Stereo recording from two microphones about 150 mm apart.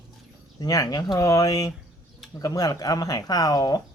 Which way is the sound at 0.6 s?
25° left (ahead or behind).